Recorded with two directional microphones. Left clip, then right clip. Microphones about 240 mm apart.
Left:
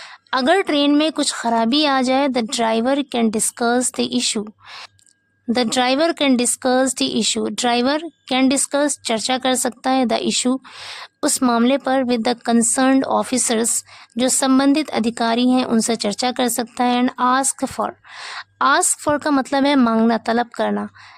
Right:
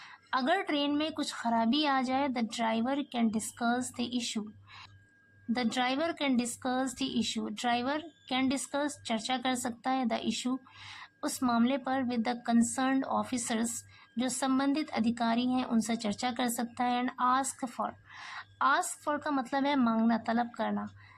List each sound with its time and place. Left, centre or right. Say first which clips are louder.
0.0 s speech: left 12 dB; left